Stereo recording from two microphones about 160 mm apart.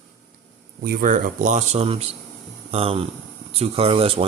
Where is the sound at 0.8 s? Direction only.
60° right (ahead or behind); by 4.2 s 35° right (ahead or behind).